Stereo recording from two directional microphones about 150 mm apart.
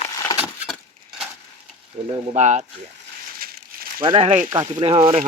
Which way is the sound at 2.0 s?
50° right (ahead or behind).